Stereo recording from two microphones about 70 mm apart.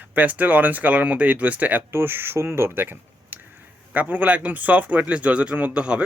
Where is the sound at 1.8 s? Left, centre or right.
Right; by 6.0 s centre.